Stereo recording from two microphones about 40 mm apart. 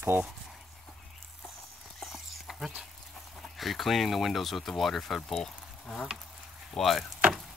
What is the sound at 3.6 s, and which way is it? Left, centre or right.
Speech, centre.